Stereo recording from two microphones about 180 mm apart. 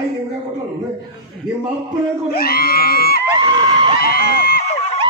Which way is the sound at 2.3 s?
55° left (ahead or behind).